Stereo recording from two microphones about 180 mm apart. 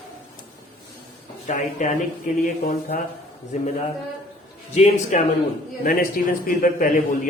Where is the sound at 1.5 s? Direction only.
45° left (ahead or behind).